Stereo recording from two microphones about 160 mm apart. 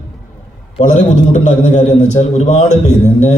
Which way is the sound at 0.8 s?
50° left (ahead or behind).